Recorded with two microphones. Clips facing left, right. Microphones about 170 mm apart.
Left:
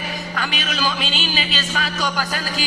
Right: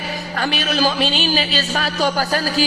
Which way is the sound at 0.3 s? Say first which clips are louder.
Right 7 dB; 40° right (ahead or behind).